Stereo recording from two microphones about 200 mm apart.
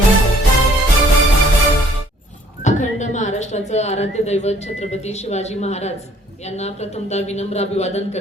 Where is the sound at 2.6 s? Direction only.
35° left (ahead or behind).